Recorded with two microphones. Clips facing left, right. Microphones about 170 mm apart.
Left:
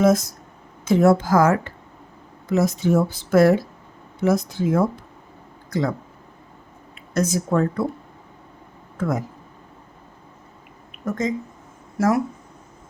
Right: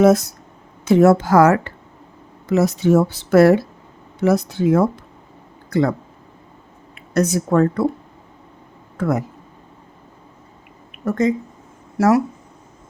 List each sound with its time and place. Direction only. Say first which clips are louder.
0.0 s speech: right 4 dB; 65° right (ahead or behind)
6.9 s speech: right 4 dB; 65° right (ahead or behind)
9.0 s speech: right 4 dB; 65° right (ahead or behind)
11.0 s speech: right 6 dB; 65° right (ahead or behind)